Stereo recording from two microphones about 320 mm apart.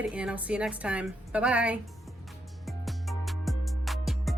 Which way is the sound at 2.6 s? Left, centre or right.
Centre.